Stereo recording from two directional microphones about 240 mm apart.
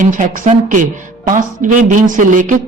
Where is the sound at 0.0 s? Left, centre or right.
Right.